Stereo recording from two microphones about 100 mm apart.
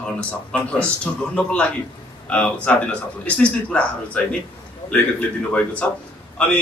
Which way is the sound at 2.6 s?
10° left (ahead or behind).